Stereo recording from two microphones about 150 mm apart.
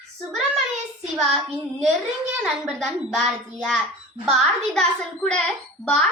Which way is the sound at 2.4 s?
5° right (ahead or behind).